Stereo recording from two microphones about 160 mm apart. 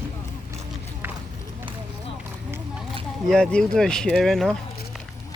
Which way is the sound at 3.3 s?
5° left (ahead or behind).